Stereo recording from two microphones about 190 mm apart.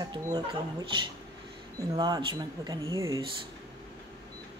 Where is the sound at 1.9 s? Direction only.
20° right (ahead or behind).